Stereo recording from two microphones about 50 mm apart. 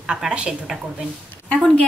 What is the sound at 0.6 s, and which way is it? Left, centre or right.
Speech, centre.